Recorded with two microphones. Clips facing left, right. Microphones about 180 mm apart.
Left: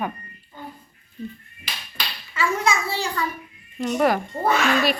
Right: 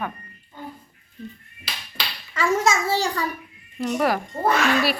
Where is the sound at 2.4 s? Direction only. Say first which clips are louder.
Right 2 dB; 45° right (ahead or behind).